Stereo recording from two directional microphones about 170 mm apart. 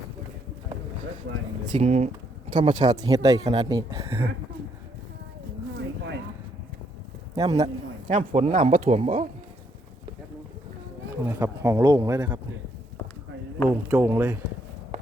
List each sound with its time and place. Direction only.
1.7 s speech: 40° right (ahead or behind)
2.5 s speech: 30° right (ahead or behind)
7.5 s a man's voice: 40° right (ahead or behind)
11.2 s speech: 15° right (ahead or behind)
13.7 s speech: 10° right (ahead or behind)